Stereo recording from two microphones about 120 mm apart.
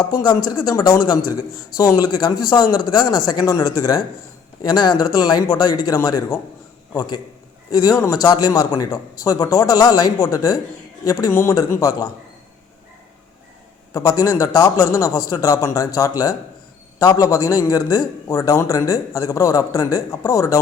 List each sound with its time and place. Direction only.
0.0 s a man's voice: 35° left (ahead or behind)
7.7 s a man's voice: 30° left (ahead or behind)
13.9 s a man's voice: 25° left (ahead or behind)